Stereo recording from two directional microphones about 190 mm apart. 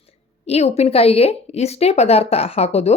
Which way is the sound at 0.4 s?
35° left (ahead or behind).